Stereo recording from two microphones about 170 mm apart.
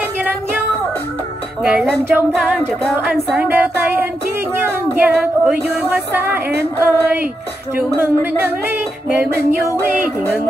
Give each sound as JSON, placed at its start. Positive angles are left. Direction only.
{"t": 1.6, "sound": "a sound", "side_deg": -5}
{"t": 3.3, "sound": "music", "side_deg": -10}
{"t": 4.9, "sound": "female singing", "side_deg": -10}
{"t": 5.8, "sound": "music", "side_deg": -10}